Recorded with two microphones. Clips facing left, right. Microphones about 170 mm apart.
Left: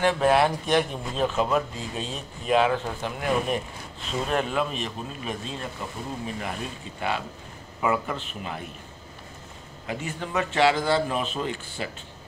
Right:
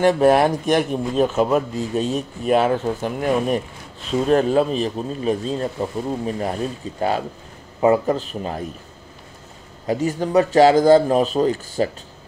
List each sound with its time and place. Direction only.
0.0 s speech: 40° right (ahead or behind)
4.3 s speech: 35° right (ahead or behind)
9.8 s speech: 40° right (ahead or behind)